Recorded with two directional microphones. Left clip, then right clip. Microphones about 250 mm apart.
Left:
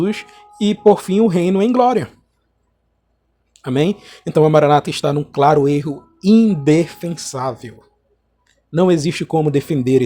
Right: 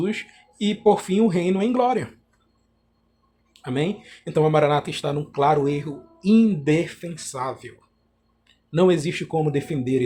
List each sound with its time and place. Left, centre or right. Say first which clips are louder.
0.0 s speech: left 6 dB; left
3.6 s speech: left 8 dB; left
8.7 s speech: left 4 dB; left